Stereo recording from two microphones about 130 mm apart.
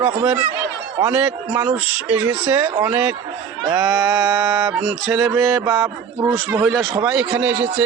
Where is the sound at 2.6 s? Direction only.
30° right (ahead or behind).